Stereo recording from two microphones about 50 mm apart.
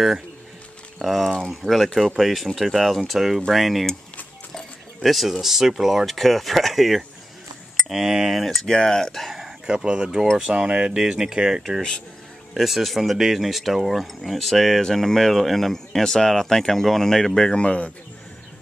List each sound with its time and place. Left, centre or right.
0.9 s speech: centre
1.6 s speech: centre
2.0 s speech: centre
5.0 s speech: centre
8.5 s speech: centre
9.8 s speech: centre
17.6 s speech: left